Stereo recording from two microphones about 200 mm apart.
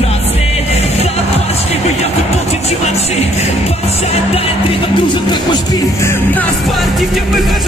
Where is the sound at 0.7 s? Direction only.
30° left (ahead or behind).